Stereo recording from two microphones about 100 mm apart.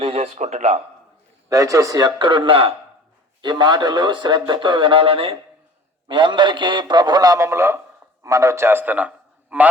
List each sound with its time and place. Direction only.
0.0 s speech: 85° right
1.5 s a man's voice: 35° right (ahead or behind); by 2.7 s 65° right (ahead or behind)
3.4 s a man's voice: 45° right (ahead or behind); by 5.4 s 65° right (ahead or behind)
6.1 s a man's voice: 50° right (ahead or behind); by 9.6 s 15° right (ahead or behind)